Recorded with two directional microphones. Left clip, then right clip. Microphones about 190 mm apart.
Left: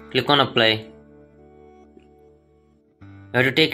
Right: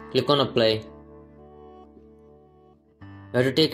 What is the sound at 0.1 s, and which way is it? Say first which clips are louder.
Speech: left 3 dB; 15° right (ahead or behind).